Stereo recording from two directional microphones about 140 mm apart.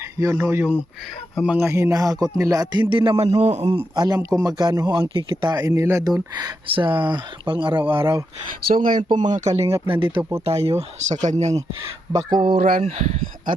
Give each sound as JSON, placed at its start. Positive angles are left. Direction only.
{"t": 0.0, "sound": "speech", "side_deg": -25}
{"t": 2.1, "sound": "speech", "side_deg": 5}
{"t": 2.4, "sound": "speech", "side_deg": -25}
{"t": 2.9, "sound": "speech", "side_deg": -40}
{"t": 3.9, "sound": "speech", "side_deg": -25}
{"t": 8.6, "sound": "speech", "side_deg": -85}
{"t": 9.1, "sound": "speech", "side_deg": -60}
{"t": 10.0, "sound": "speech", "side_deg": -20}
{"t": 10.4, "sound": "speech", "side_deg": -50}
{"t": 12.1, "sound": "speech", "side_deg": -30}
{"t": 12.5, "sound": "speech", "side_deg": -90}
{"t": 12.8, "sound": "speech", "side_deg": -55}